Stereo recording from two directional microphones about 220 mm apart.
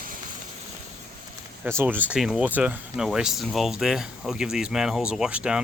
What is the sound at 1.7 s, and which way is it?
Speech, 10° right (ahead or behind).